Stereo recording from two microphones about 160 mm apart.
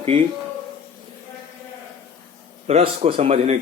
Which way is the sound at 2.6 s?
40° right (ahead or behind).